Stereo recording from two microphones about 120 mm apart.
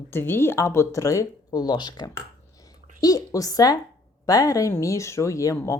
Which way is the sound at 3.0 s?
30° left (ahead or behind).